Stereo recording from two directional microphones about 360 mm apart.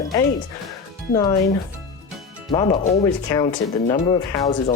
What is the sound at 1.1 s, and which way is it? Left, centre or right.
Speech, centre.